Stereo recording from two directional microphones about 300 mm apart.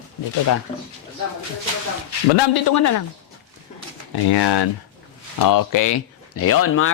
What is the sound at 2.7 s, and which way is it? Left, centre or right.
Speech, left.